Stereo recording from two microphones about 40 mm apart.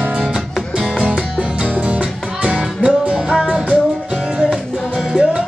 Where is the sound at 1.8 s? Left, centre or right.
Right.